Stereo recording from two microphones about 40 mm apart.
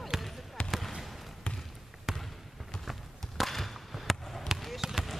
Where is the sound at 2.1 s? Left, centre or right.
Centre.